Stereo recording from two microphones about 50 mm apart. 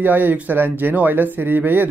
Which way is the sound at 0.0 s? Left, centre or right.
Right.